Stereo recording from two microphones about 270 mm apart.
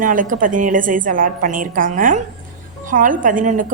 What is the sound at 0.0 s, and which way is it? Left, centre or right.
A woman's voice, right.